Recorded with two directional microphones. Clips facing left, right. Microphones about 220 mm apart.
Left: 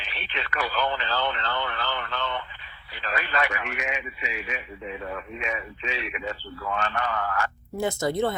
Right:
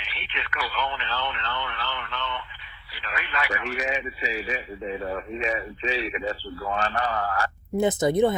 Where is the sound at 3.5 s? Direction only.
35° right (ahead or behind).